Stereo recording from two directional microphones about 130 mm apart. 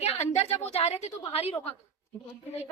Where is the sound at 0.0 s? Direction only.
55° left (ahead or behind).